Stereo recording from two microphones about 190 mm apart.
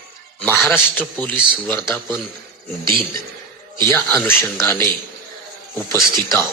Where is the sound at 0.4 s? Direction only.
10° left (ahead or behind).